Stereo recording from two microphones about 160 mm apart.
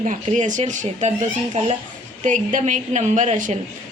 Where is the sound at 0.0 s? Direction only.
50° right (ahead or behind).